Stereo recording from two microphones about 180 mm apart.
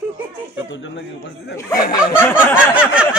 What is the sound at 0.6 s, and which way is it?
Speech, 90° left.